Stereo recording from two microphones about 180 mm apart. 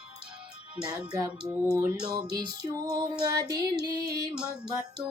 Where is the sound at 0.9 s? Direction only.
5° right (ahead or behind).